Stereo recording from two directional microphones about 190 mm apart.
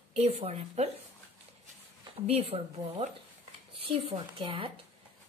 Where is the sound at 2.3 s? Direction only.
30° right (ahead or behind).